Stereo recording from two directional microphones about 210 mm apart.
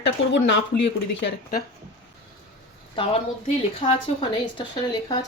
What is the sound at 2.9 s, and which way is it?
A woman's voice, 25° left (ahead or behind).